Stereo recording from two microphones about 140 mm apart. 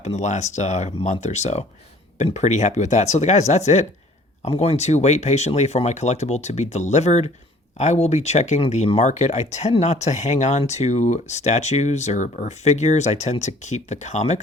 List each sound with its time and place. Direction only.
0.0 s speech: 55° left (ahead or behind)